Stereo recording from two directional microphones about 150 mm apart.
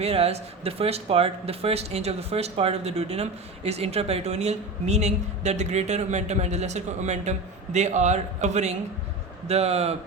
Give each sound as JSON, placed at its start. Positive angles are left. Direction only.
{"t": 0.0, "sound": "speech", "side_deg": -45}